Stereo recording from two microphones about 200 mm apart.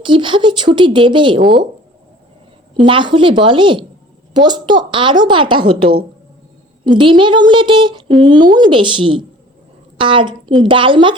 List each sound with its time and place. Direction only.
0.0 s a woman's voice: 25° right (ahead or behind)
2.8 s a woman's voice: 25° right (ahead or behind)